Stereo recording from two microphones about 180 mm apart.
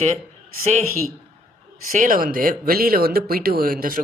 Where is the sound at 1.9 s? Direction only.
50° right (ahead or behind).